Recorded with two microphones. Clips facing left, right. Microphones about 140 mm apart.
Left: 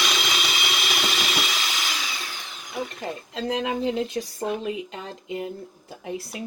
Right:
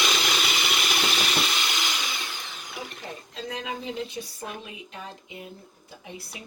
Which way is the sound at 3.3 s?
90° left.